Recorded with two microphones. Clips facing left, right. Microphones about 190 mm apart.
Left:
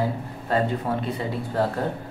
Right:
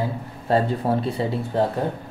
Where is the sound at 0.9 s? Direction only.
35° right (ahead or behind).